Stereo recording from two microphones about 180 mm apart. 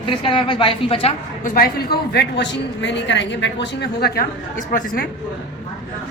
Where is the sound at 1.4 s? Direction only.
55° left (ahead or behind).